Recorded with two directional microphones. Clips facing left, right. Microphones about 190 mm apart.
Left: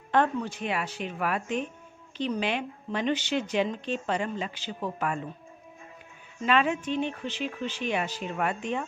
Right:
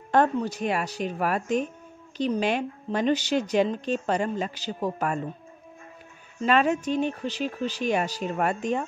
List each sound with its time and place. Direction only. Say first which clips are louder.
0.1 s a woman's voice: right 3 dB; 40° right (ahead or behind)
6.4 s a woman's voice: right 3 dB; 40° right (ahead or behind)